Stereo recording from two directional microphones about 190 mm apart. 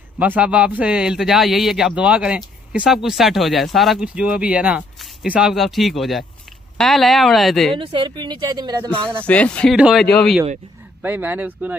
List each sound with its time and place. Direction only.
0.2 s a man's voice: 5° right (ahead or behind)
7.7 s speech: 25° right (ahead or behind)
9.2 s a man's voice: 5° left (ahead or behind)
11.0 s speech: 10° right (ahead or behind)